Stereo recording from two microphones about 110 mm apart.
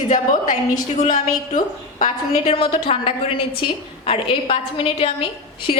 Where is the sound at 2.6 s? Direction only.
55° left (ahead or behind).